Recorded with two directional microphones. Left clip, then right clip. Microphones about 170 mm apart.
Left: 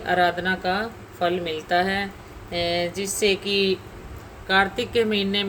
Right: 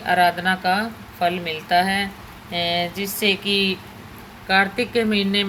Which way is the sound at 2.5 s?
20° left (ahead or behind).